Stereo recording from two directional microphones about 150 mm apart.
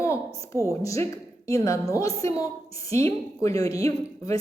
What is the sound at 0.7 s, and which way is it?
A woman's voice, 20° left (ahead or behind).